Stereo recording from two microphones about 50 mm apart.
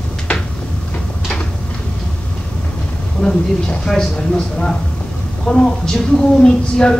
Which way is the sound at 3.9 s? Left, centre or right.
Centre.